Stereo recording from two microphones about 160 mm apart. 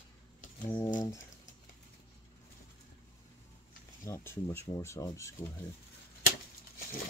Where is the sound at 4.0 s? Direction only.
15° left (ahead or behind).